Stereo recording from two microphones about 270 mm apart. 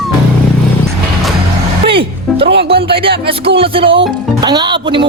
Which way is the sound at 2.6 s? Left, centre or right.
Centre.